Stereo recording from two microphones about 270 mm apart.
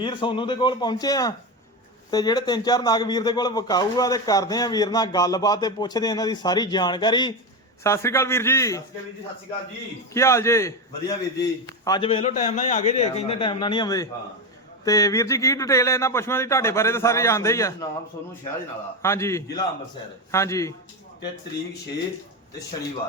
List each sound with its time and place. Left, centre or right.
0.0 s speech: centre
10.2 s a man's voice: centre